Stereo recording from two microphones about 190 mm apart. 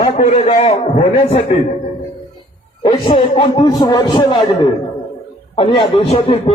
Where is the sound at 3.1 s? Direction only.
25° left (ahead or behind).